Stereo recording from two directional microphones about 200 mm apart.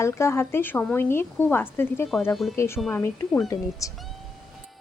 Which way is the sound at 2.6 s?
15° left (ahead or behind).